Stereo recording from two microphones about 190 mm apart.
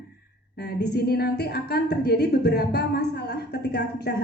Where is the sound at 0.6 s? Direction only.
60° left (ahead or behind).